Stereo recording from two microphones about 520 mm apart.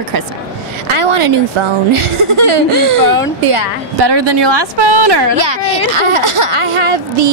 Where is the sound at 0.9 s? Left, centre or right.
Right.